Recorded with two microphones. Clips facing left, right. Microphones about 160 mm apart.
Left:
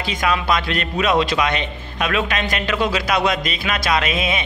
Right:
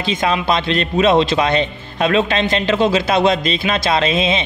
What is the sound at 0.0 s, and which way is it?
Speech, 25° right (ahead or behind).